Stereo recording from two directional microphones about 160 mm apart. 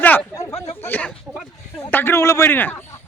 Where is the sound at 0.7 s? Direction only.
10° left (ahead or behind).